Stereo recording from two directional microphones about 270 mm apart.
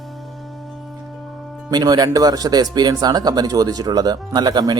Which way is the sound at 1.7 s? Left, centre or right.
Centre.